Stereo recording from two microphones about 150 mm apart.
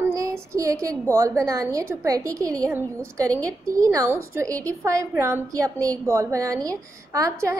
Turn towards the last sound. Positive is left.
turn(degrees=-20)  # may be behind; listen again after turning